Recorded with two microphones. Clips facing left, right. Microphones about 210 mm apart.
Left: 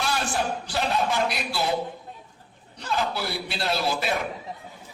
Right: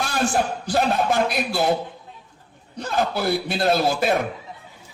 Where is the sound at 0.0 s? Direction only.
50° right (ahead or behind).